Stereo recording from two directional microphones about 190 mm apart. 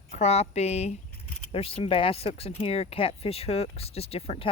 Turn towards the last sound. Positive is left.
turn(degrees=30)  # may be behind; listen again after turning